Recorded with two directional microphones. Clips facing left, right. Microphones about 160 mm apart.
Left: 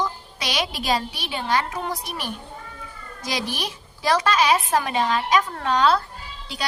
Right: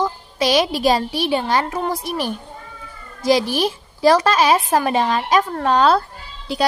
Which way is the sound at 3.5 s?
35° right (ahead or behind).